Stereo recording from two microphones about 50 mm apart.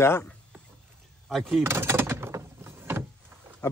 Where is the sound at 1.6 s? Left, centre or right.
Right.